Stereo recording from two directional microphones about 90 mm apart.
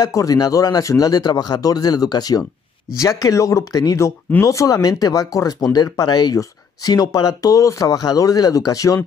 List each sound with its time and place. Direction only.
0.0 s speech: 40° left (ahead or behind)